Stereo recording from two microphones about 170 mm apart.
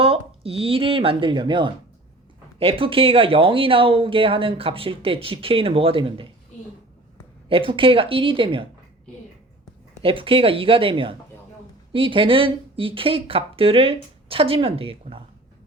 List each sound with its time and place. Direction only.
0.0 s speech: 35° right (ahead or behind)
7.4 s speech: 30° right (ahead or behind)
10.0 s speech: 30° right (ahead or behind)